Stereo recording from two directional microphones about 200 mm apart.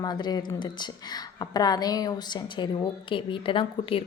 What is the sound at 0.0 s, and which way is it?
Speech, 20° left (ahead or behind).